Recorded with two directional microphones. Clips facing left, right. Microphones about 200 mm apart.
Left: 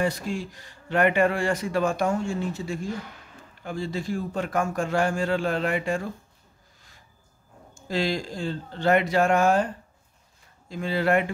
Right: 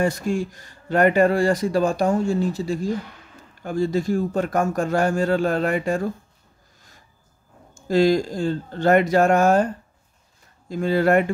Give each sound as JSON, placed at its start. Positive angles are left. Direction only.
{"t": 0.0, "sound": "a man's voice", "side_deg": -45}
{"t": 7.7, "sound": "a man's voice", "side_deg": -45}
{"t": 10.7, "sound": "a man's voice", "side_deg": -45}